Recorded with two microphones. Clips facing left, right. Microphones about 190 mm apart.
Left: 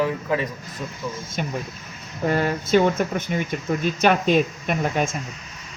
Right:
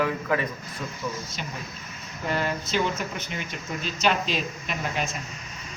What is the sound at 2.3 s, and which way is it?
Speech, 50° left (ahead or behind).